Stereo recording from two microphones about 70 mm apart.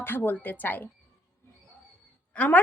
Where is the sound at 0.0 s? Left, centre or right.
Left.